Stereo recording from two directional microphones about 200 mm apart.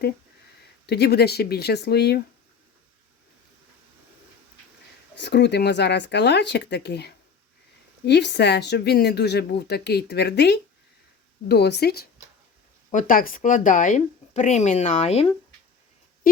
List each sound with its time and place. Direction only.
0.9 s speech: 55° left (ahead or behind)
5.1 s speech: 60° left (ahead or behind)
12.9 s speech: 40° left (ahead or behind)
16.2 s speech: 45° left (ahead or behind)